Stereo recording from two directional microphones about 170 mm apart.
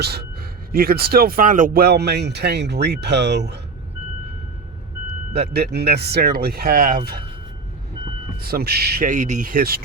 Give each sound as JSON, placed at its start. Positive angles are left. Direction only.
{"t": 0.0, "sound": "speech", "side_deg": -70}
{"t": 5.3, "sound": "speech", "side_deg": -70}
{"t": 8.4, "sound": "speech", "side_deg": -65}